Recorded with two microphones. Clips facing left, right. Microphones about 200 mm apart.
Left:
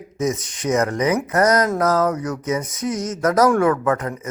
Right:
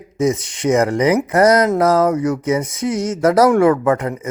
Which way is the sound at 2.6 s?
30° right (ahead or behind).